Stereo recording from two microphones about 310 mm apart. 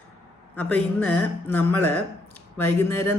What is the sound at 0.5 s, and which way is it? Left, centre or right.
Speech, centre.